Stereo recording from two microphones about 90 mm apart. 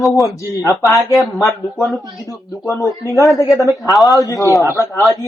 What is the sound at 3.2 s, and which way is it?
A man's voice, 40° left (ahead or behind).